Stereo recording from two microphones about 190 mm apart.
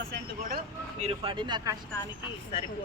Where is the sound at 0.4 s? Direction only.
40° right (ahead or behind); by 1.7 s 20° right (ahead or behind).